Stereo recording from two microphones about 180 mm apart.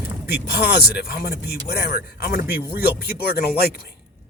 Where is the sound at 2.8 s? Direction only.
60° left (ahead or behind).